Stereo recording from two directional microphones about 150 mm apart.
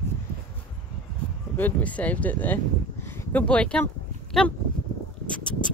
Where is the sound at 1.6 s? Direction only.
10° left (ahead or behind).